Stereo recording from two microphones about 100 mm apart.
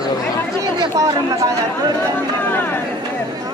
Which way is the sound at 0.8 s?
35° right (ahead or behind).